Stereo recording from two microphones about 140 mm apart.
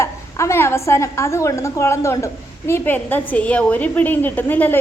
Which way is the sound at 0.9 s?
20° left (ahead or behind).